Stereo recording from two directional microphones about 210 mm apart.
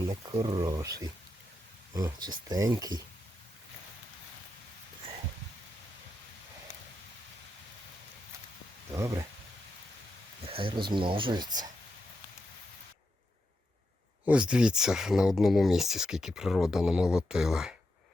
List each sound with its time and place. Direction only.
0.1 s speech: 20° right (ahead or behind)
8.9 s speech: 15° right (ahead or behind)
10.4 s speech: 25° right (ahead or behind)
14.3 s speech: 5° right (ahead or behind)